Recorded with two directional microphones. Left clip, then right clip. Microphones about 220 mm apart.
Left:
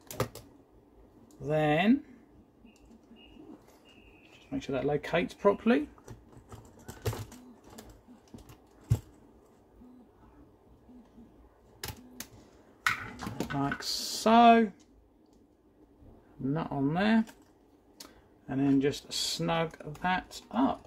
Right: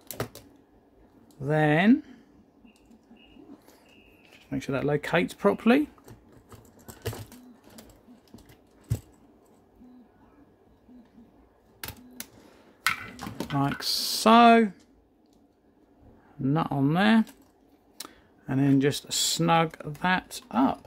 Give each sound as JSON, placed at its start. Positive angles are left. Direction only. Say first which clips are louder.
{"t": 1.4, "sound": "speech", "louder": "right 4 dB", "side_deg": -45}
{"t": 4.5, "sound": "speech", "louder": "right 3 dB", "side_deg": -40}
{"t": 12.8, "sound": "a sound", "louder": "right 2 dB", "side_deg": -35}
{"t": 16.4, "sound": "speech", "louder": "right 6 dB", "side_deg": -35}
{"t": 18.5, "sound": "speech", "louder": "right 4 dB", "side_deg": -45}